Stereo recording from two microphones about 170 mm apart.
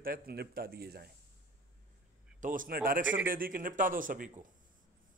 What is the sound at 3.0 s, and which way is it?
Speech, 10° right (ahead or behind).